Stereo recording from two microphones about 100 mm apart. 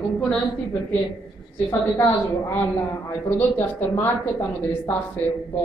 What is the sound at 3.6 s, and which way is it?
Speech, 20° left (ahead or behind).